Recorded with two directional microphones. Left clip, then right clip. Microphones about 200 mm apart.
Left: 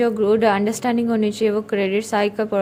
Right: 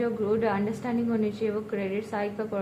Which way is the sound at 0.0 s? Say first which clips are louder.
Left 10 dB; 40° left (ahead or behind).